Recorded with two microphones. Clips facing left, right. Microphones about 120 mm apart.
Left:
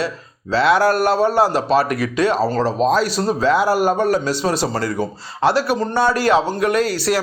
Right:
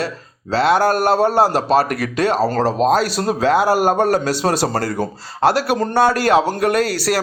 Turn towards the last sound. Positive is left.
turn(degrees=-50)  # may be behind; listen again after turning